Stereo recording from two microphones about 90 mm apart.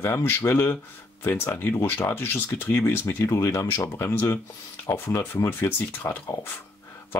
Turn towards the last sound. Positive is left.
turn(degrees=25)  # may be behind; listen again after turning